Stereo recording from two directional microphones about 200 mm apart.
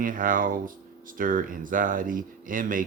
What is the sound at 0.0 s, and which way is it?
Speech, 45° right (ahead or behind).